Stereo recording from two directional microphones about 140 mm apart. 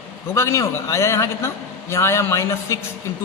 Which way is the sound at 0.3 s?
20° left (ahead or behind).